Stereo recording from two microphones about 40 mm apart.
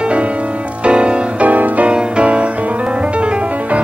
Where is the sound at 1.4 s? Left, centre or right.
Right.